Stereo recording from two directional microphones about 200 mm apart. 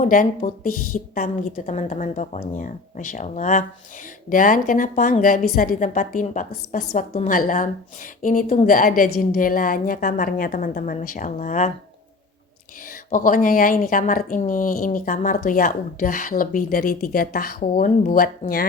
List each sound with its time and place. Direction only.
0.0 s a woman's voice: 40° left (ahead or behind)
13.1 s a woman's voice: 40° left (ahead or behind)